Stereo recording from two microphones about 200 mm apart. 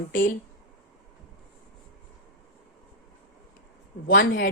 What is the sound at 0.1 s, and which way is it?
Speech, 45° left (ahead or behind).